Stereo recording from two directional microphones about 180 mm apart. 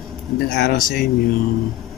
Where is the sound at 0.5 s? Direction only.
55° left (ahead or behind).